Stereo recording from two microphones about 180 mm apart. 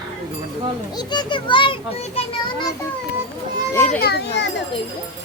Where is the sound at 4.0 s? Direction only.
65° left (ahead or behind).